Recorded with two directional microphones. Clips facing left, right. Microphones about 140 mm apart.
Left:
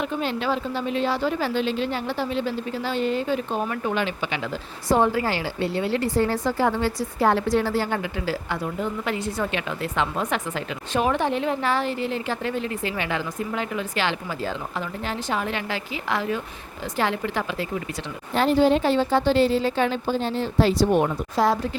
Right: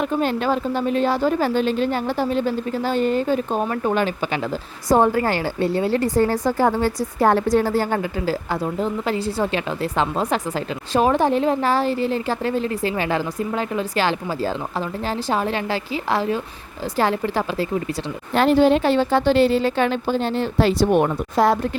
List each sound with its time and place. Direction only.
0.0 s a woman's voice: 45° right (ahead or behind)
18.3 s a woman's voice: 70° right (ahead or behind)